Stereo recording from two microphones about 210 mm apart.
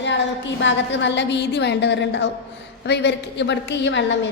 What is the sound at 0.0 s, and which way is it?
A woman's voice, 60° left (ahead or behind).